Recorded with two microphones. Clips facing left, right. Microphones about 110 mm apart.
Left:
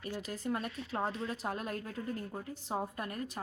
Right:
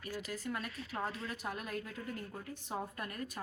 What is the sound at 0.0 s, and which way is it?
A woman's voice, 25° left (ahead or behind).